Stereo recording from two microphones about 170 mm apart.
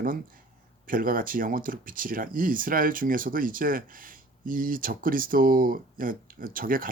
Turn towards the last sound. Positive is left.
turn(degrees=-55)  # may be behind; listen again after turning